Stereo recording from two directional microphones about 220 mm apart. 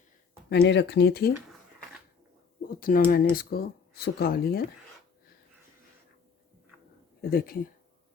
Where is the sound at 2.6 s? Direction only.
40° left (ahead or behind).